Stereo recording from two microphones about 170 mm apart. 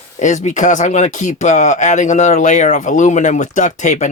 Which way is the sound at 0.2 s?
45° left (ahead or behind).